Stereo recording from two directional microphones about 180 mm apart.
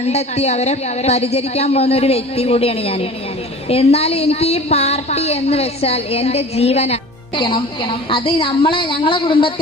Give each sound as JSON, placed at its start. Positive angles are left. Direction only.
{"t": 0.0, "sound": "a woman's voice", "side_deg": 35}